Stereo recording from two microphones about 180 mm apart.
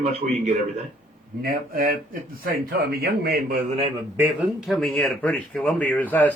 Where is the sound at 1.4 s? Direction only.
55° right (ahead or behind).